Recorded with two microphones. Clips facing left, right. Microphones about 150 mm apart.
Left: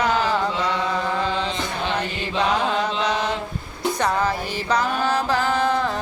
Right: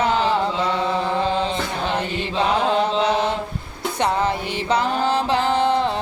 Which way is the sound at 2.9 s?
30° right (ahead or behind).